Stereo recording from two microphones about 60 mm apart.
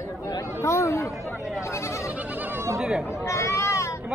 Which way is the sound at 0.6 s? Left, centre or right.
Left.